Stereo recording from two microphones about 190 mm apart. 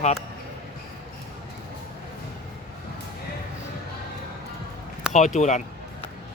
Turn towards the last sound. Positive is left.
turn(degrees=40)  # may be behind; listen again after turning